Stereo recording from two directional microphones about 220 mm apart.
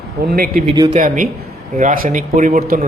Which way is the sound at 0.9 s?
35° right (ahead or behind).